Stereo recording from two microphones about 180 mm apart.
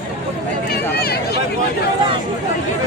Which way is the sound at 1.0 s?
60° left (ahead or behind).